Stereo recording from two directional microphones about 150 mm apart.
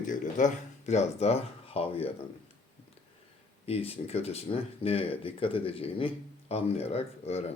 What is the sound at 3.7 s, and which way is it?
Speech, 40° left (ahead or behind).